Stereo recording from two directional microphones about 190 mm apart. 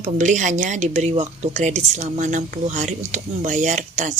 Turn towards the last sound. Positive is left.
turn(degrees=-40)  # may be behind; listen again after turning